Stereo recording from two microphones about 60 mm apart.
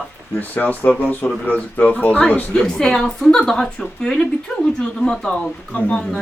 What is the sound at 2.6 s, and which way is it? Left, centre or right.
A woman's voice, centre.